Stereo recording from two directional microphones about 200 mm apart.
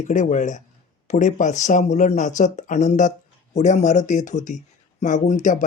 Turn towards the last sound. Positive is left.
turn(degrees=40)  # may be behind; listen again after turning